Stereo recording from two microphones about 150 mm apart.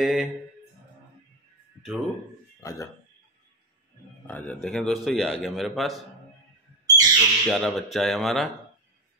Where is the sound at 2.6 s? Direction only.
20° left (ahead or behind).